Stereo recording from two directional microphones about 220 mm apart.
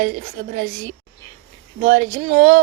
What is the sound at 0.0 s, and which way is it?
Speech, 40° right (ahead or behind).